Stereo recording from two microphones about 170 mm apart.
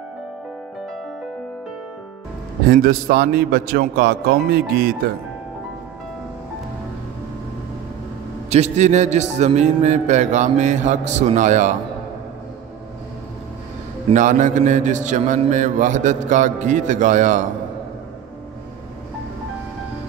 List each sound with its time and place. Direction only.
2.6 s a man's voice: 60° right (ahead or behind)
8.5 s a man's voice: 40° right (ahead or behind)
14.1 s a man's voice: 50° right (ahead or behind)